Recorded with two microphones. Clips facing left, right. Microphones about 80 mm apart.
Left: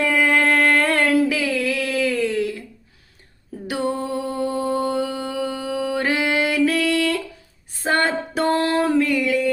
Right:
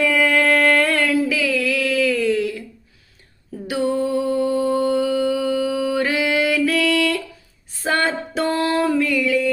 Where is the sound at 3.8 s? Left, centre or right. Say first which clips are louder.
Right 4 dB; left.